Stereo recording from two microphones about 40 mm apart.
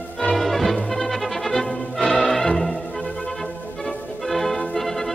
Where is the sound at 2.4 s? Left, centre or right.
Centre.